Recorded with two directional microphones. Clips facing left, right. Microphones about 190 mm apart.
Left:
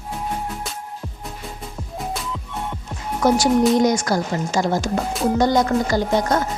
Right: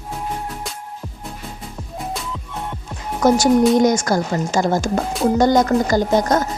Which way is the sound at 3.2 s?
45° right (ahead or behind).